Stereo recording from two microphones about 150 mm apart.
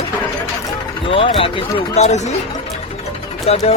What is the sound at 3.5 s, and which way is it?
Speech, 40° left (ahead or behind).